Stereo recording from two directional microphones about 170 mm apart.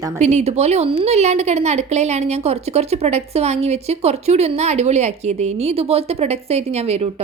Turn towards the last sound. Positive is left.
turn(degrees=-40)  # may be behind; listen again after turning